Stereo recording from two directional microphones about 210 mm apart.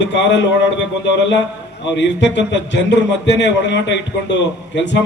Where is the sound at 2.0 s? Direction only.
55° left (ahead or behind).